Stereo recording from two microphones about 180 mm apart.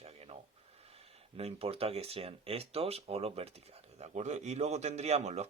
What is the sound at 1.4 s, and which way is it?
Speech, 35° right (ahead or behind).